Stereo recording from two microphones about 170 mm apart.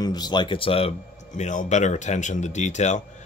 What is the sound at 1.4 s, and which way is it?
Speech, 45° left (ahead or behind).